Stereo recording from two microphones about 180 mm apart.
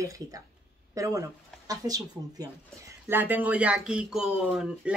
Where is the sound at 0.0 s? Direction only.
20° right (ahead or behind).